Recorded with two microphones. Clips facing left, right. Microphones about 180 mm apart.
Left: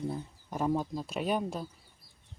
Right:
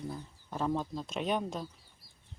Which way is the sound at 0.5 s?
10° left (ahead or behind).